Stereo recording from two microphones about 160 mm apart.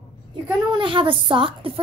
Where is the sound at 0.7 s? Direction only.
30° right (ahead or behind).